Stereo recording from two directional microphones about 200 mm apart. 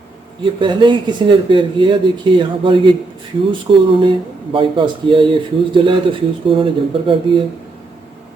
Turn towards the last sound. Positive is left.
turn(degrees=-25)  # may be behind; listen again after turning